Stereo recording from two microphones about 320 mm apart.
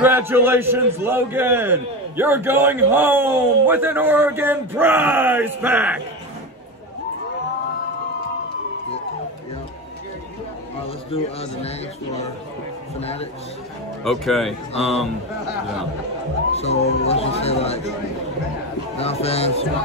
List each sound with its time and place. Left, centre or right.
0.0 s a man's voice: centre
10.8 s a man's voice: centre
13.0 s speech: centre
14.0 s speech: centre
14.7 s speech: centre
16.5 s speech: centre
18.9 s speech: centre